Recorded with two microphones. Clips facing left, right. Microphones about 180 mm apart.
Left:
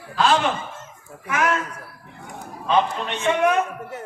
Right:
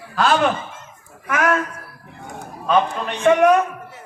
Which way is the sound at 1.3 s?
50° right (ahead or behind).